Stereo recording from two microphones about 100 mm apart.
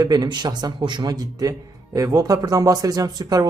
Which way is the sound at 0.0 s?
40° right (ahead or behind).